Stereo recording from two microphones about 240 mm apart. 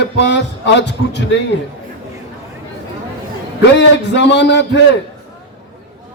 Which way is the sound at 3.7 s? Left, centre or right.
Left.